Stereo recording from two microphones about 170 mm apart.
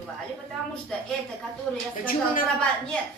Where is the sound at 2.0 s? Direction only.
55° left (ahead or behind).